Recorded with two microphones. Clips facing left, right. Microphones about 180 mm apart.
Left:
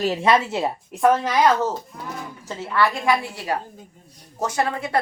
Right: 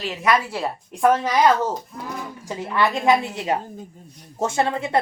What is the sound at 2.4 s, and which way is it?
A woman's voice, 15° right (ahead or behind).